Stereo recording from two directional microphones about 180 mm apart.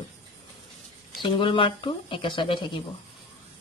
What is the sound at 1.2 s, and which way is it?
A woman's voice, 30° left (ahead or behind).